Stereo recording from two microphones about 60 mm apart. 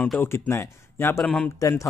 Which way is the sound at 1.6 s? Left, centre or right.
Left.